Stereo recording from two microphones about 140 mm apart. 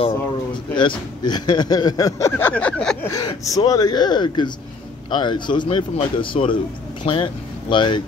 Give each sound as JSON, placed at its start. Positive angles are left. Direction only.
{"t": 0.7, "sound": "speech", "side_deg": 30}
{"t": 3.0, "sound": "speech", "side_deg": 20}